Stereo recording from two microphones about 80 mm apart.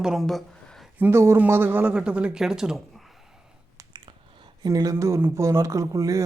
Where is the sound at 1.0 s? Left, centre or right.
Right.